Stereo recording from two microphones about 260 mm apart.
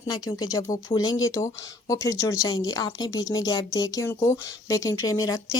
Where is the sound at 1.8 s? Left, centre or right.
Centre.